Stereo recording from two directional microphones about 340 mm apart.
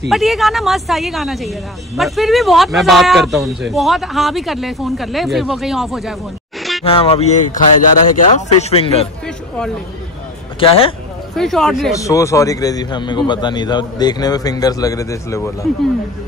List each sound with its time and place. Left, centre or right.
0.1 s speech: centre
6.8 s speech: centre
10.6 s speech: centre
11.3 s speech: centre